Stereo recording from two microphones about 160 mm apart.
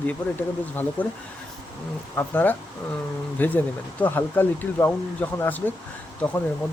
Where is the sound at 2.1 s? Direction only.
10° left (ahead or behind).